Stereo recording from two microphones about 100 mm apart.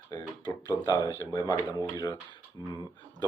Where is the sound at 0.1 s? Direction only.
45° left (ahead or behind).